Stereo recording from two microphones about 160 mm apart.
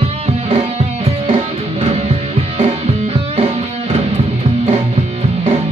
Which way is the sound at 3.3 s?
40° right (ahead or behind).